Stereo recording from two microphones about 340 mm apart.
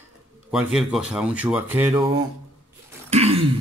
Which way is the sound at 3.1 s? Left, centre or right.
Centre.